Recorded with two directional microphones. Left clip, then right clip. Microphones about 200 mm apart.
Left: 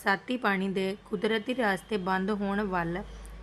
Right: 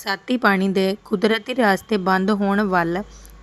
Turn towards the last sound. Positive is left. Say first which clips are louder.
# right 11 dB
turn(degrees=-40)  # may be behind; listen again after turning